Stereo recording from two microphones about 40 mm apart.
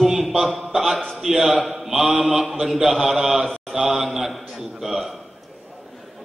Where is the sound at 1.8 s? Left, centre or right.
Centre.